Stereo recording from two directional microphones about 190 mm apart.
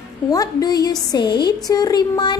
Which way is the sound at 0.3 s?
20° left (ahead or behind).